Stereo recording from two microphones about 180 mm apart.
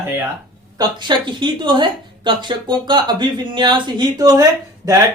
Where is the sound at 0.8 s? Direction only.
25° right (ahead or behind).